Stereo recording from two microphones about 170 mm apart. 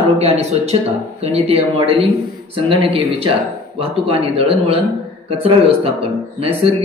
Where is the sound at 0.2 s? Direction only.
40° right (ahead or behind).